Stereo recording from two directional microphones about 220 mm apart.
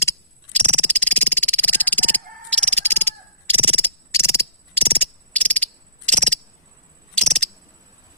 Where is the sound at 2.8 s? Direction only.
10° left (ahead or behind).